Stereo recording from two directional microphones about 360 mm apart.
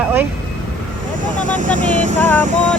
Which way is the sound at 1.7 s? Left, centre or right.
Centre.